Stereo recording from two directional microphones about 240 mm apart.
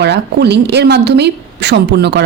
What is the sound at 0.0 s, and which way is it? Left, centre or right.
Speech, right.